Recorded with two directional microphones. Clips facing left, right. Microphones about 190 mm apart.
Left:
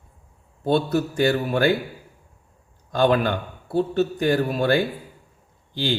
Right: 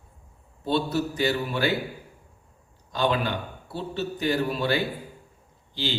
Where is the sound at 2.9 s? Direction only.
50° left (ahead or behind).